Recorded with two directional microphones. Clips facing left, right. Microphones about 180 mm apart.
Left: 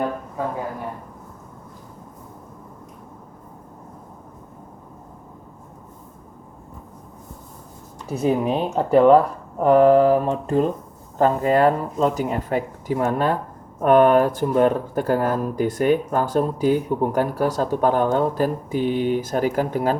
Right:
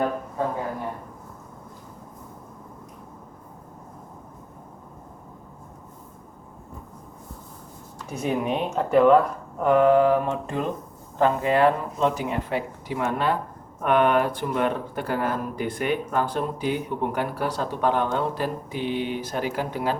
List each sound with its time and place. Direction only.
8.1 s speech: 35° left (ahead or behind)